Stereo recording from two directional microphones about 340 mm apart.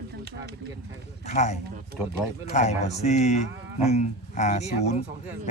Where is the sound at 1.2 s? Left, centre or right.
Centre.